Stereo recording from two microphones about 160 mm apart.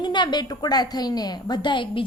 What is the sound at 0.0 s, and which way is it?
A woman's voice, 30° left (ahead or behind).